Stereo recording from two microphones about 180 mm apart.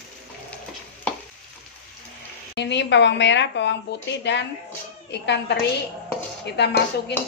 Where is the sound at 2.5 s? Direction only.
75° left (ahead or behind).